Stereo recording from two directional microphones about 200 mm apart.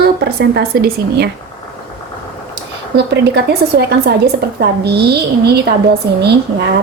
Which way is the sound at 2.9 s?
55° right (ahead or behind).